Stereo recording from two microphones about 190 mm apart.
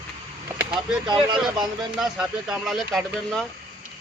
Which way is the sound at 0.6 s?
5° right (ahead or behind).